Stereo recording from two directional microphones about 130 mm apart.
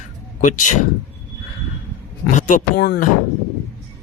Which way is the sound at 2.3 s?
75° left (ahead or behind).